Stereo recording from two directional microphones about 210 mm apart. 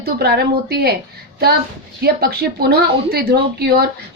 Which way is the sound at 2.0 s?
50° right (ahead or behind).